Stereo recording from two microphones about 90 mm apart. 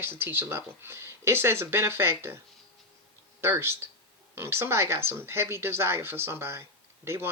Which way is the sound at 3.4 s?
25° right (ahead or behind).